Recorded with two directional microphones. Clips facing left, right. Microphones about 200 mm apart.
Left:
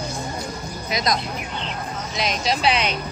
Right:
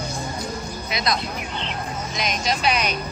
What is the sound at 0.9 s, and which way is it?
Speech, 40° left (ahead or behind).